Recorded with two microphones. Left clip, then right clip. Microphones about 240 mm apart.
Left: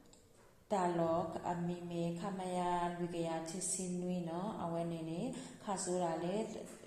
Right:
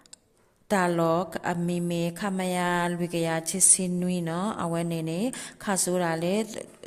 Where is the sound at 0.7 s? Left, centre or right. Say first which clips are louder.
Right 11 dB; right.